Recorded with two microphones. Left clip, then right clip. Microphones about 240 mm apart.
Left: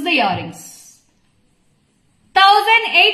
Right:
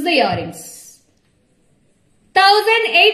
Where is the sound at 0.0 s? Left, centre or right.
Centre.